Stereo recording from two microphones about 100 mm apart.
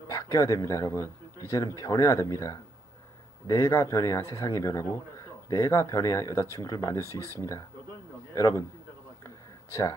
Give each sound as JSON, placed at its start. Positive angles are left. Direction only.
{"t": 0.1, "sound": "speech", "side_deg": 35}